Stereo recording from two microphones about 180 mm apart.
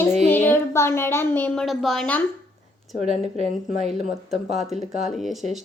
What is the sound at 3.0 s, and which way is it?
Speech, 35° right (ahead or behind).